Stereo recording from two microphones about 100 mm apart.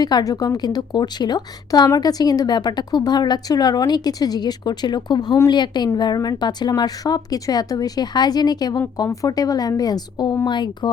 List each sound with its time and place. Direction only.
0.0 s speech: 40° left (ahead or behind)